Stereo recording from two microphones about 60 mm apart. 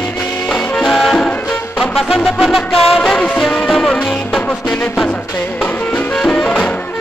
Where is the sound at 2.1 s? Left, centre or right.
Centre.